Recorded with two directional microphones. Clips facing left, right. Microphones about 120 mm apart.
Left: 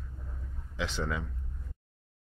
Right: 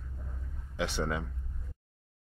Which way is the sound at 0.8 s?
55° right (ahead or behind).